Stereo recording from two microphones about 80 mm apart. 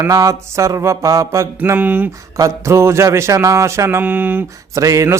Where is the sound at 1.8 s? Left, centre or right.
Right.